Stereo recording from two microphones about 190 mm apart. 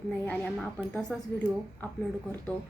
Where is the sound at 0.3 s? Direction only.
5° left (ahead or behind).